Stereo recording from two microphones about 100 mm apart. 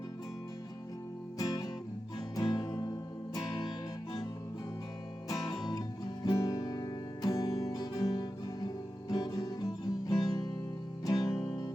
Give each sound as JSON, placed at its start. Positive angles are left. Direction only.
{"t": 1.4, "sound": "music", "side_deg": 40}
{"t": 5.3, "sound": "music", "side_deg": 40}